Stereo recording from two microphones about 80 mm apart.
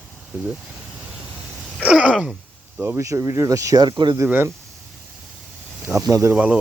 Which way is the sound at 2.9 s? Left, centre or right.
Right.